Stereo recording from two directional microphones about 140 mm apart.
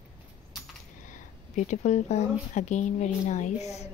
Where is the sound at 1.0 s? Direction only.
60° left (ahead or behind).